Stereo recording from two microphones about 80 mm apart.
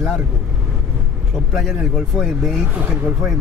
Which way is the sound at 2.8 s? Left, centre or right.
Centre.